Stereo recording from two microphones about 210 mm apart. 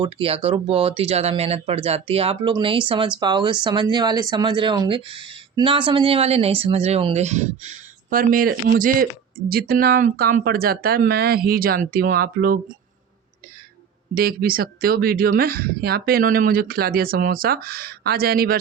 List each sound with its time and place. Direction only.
0.0 s speech: 25° right (ahead or behind); by 12.7 s 45° right (ahead or behind)
14.2 s speech: 45° right (ahead or behind)